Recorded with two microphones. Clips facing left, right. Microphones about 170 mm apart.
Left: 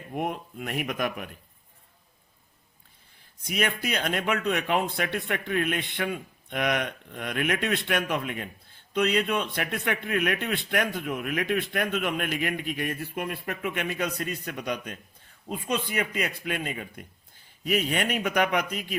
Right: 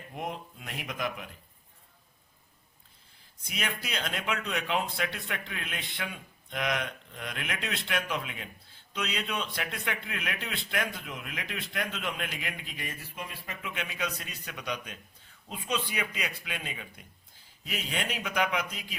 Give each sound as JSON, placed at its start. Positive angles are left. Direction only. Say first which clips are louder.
{"t": 0.1, "sound": "a man's voice", "louder": "left 6 dB", "side_deg": 55}
{"t": 3.4, "sound": "a man's voice", "louder": "left 8 dB", "side_deg": 55}